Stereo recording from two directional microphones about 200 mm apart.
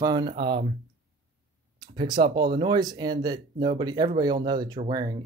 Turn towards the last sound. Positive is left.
turn(degrees=-20)  # may be behind; listen again after turning